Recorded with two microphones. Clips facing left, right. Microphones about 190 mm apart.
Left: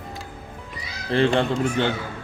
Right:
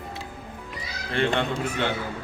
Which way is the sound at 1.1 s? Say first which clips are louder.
Left 5 dB; 35° left (ahead or behind).